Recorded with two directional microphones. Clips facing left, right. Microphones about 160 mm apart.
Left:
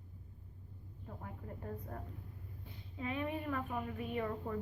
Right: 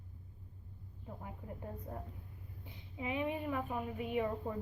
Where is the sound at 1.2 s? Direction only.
15° right (ahead or behind).